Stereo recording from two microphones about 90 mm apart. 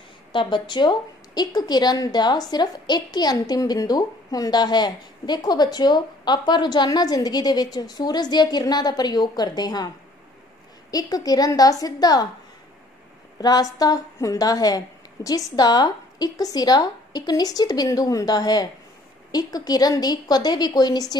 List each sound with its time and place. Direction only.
0.3 s a woman's voice: 60° left (ahead or behind)
10.9 s a woman's voice: 45° left (ahead or behind)
13.4 s a woman's voice: 45° left (ahead or behind)